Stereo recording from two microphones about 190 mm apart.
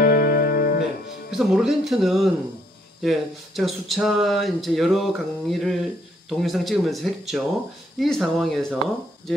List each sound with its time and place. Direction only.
0.0 s music: 55° left (ahead or behind)
1.3 s speech: centre (ahead or behind)